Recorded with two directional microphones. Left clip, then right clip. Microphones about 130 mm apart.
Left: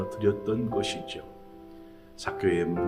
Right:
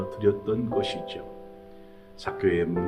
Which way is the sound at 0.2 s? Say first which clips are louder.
Right 3 dB; 15° left (ahead or behind).